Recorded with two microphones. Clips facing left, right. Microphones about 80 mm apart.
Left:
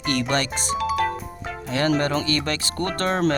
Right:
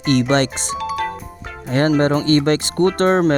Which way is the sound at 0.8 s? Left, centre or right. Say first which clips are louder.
Even; centre.